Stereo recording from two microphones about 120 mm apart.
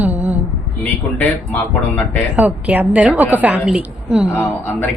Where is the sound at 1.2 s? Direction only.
15° left (ahead or behind).